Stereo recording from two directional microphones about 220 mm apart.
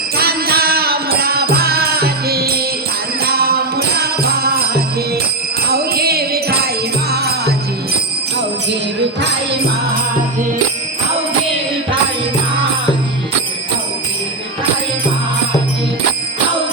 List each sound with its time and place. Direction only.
0.2 s music: 45° right (ahead or behind)